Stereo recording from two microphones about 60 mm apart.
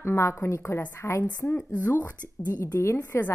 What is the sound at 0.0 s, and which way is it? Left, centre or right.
A woman's voice, left.